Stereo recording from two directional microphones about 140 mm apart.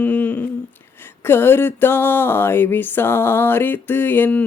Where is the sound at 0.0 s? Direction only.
10° left (ahead or behind).